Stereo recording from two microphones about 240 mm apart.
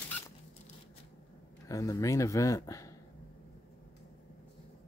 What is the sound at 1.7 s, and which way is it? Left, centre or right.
Speech, centre.